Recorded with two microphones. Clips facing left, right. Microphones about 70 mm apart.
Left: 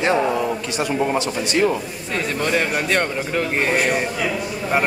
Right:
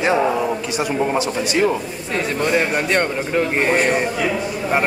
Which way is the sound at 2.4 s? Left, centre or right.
Centre.